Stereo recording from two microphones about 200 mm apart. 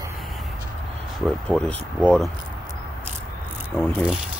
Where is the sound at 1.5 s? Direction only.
5° left (ahead or behind).